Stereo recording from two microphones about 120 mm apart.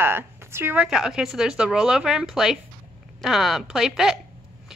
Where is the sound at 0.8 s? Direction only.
5° right (ahead or behind).